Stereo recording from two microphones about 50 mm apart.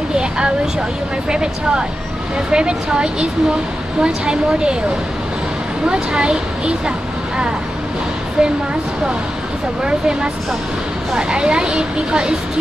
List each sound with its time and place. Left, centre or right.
0.1 s a sound: centre
1.3 s a woman's voice: centre
5.9 s speech: centre
8.4 s a woman's voice: centre
9.8 s a woman's voice: centre